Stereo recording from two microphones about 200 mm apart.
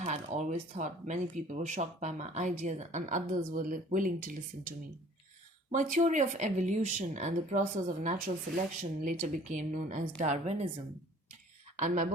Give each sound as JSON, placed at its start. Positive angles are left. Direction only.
{"t": 0.0, "sound": "speech", "side_deg": -35}
{"t": 5.7, "sound": "speech", "side_deg": -40}
{"t": 11.8, "sound": "speech", "side_deg": -40}